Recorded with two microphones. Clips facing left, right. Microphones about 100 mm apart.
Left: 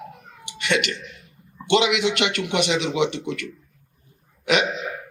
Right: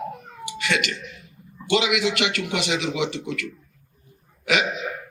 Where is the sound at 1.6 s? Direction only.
25° left (ahead or behind).